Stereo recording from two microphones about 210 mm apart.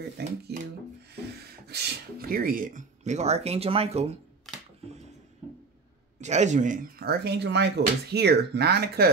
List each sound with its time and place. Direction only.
1.7 s speech: 50° right (ahead or behind); by 4.1 s 30° right (ahead or behind)
4.5 s a sound: centre (ahead or behind)
6.2 s speech: 35° right (ahead or behind); by 9.1 s 50° right (ahead or behind)